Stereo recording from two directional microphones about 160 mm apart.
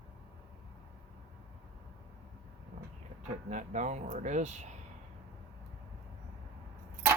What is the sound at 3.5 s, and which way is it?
Speech, 50° right (ahead or behind).